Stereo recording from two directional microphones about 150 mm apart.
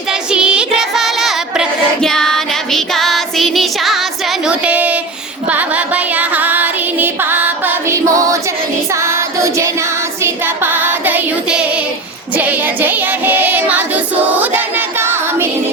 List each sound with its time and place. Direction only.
0.1 s child singing: 5° right (ahead or behind)
5.5 s female singing: 10° right (ahead or behind)
8.9 s music: 20° right (ahead or behind)
10.2 s child singing: 15° right (ahead or behind)